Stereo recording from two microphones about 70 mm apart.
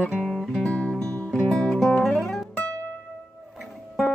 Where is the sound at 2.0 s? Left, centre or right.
Centre.